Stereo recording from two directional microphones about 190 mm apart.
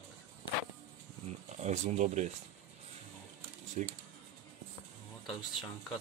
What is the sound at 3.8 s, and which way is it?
Speech, 40° right (ahead or behind).